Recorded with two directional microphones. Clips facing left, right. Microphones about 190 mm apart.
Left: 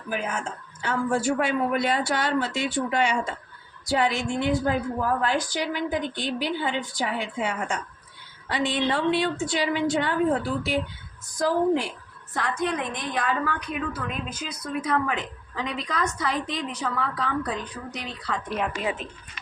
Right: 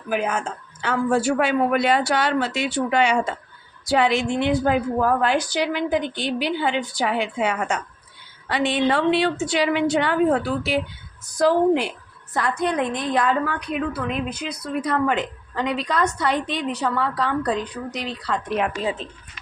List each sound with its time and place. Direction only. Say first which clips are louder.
0.1 s a woman's voice: right 6 dB; 70° right (ahead or behind)
8.4 s a woman's voice: right 4 dB; 70° right (ahead or behind)
18.8 s speech: right 3 dB; 30° right (ahead or behind)